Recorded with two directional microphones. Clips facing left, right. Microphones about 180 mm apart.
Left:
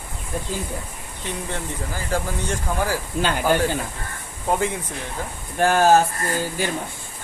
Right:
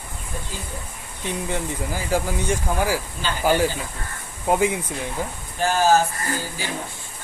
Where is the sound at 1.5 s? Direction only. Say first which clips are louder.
Right 3 dB; 10° right (ahead or behind).